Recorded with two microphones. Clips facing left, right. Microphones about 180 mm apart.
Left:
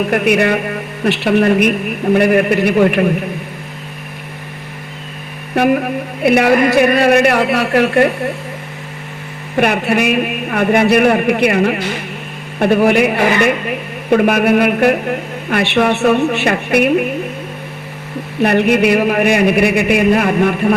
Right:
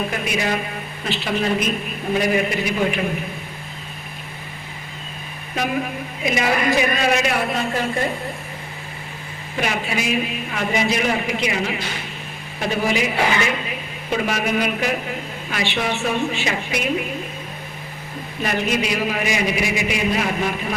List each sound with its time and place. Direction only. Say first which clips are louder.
0.1 s a man's voice: left 10 dB; 65° left (ahead or behind)
5.5 s a man's voice: left 10 dB; 60° left (ahead or behind)
9.6 s a man's voice: left 10 dB; 65° left (ahead or behind)
18.3 s a man's voice: left 10 dB; 65° left (ahead or behind)